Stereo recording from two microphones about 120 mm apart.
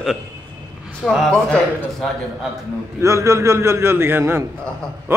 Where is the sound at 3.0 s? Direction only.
25° right (ahead or behind).